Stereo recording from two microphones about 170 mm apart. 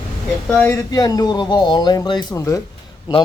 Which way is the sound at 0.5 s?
15° left (ahead or behind).